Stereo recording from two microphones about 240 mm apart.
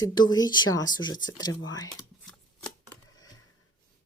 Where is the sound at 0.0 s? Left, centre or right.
Centre.